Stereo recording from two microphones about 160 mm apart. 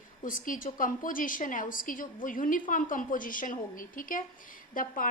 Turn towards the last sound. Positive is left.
turn(degrees=60)  # may be behind; listen again after turning